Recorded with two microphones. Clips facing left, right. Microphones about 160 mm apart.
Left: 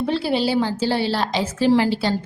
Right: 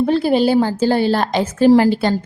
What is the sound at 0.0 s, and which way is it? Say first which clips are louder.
A woman's voice: right 6 dB; 45° right (ahead or behind).